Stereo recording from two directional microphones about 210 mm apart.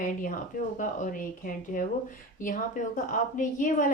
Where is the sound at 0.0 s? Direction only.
40° left (ahead or behind).